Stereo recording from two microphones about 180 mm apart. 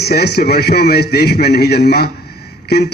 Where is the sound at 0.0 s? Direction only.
65° left (ahead or behind).